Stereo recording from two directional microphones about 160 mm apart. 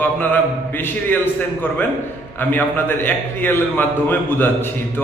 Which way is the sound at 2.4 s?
10° left (ahead or behind).